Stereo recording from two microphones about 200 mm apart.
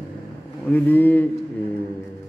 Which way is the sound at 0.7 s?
10° left (ahead or behind).